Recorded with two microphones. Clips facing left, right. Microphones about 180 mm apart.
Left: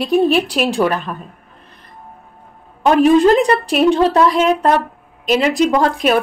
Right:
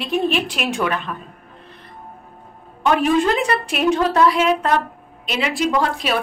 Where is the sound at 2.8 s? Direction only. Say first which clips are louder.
Left 6 dB; 40° left (ahead or behind).